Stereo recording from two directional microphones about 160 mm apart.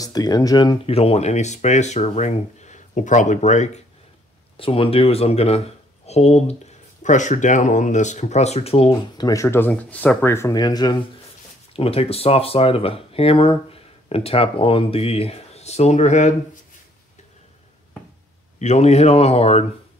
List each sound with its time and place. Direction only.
0.0 s speech: 25° left (ahead or behind)
0.8 s speech: 40° left (ahead or behind)
4.6 s speech: 35° left (ahead or behind)
9.2 s speech: 20° left (ahead or behind)
11.7 s speech: 40° left (ahead or behind)
18.6 s speech: 45° left (ahead or behind)